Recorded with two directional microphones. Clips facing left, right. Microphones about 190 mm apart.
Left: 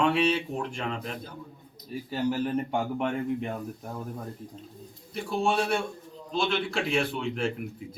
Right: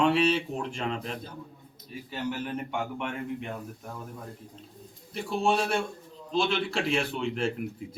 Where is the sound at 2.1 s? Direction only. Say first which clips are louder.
Left 5 dB; 35° left (ahead or behind).